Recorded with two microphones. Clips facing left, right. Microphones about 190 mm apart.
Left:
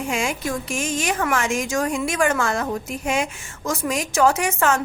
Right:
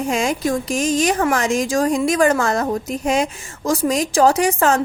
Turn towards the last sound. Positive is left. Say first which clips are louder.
# right 4 dB
turn(degrees=-35)  # may be behind; listen again after turning